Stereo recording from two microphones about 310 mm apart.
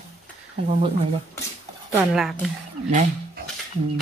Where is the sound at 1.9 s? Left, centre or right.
Centre.